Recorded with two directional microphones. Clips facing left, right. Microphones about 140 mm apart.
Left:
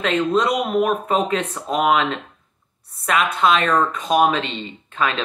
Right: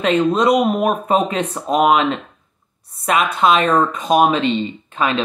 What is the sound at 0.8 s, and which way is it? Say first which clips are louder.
Speech: right 3 dB; 15° right (ahead or behind).